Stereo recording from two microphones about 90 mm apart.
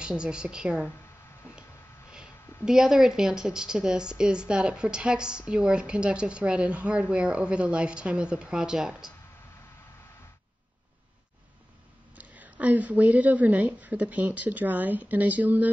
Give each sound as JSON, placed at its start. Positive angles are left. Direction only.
{"t": 0.0, "sound": "speech", "side_deg": -10}
{"t": 2.0, "sound": "speech", "side_deg": -10}
{"t": 12.2, "sound": "speech", "side_deg": -15}